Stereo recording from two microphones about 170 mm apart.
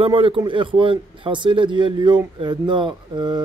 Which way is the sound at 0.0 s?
30° right (ahead or behind).